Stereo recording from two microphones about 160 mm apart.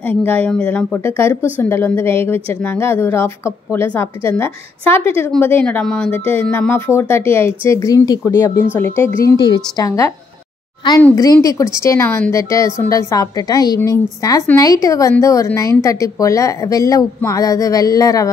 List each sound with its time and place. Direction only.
0.0 s a woman's voice: 10° left (ahead or behind)
11.4 s a woman's voice: 20° left (ahead or behind)